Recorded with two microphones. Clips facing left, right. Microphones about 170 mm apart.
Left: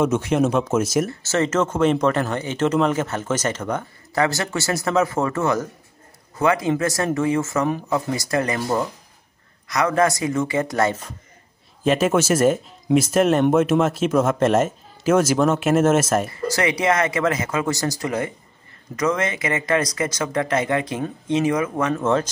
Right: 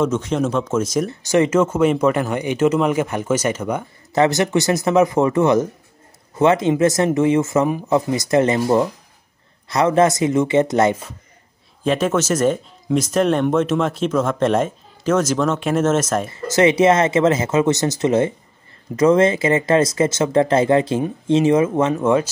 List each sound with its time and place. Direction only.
0.0 s speech: 10° left (ahead or behind)
1.0 s speech: 15° right (ahead or behind)
11.8 s speech: 5° left (ahead or behind)
16.3 s speech: 25° right (ahead or behind)
22.0 s speech: 10° right (ahead or behind)